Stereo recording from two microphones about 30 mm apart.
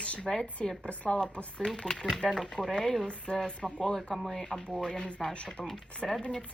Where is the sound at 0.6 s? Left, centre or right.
Left.